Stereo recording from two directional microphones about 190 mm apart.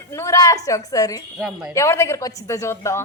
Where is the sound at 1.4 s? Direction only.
Centre (ahead or behind).